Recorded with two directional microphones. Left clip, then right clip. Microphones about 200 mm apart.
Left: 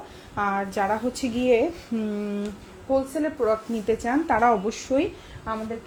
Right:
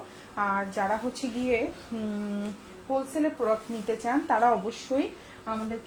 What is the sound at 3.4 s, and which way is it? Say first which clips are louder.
A woman's voice: left 4 dB; 50° left (ahead or behind).